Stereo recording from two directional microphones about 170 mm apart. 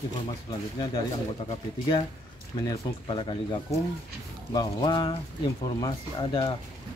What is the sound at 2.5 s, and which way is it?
Speech, 25° left (ahead or behind).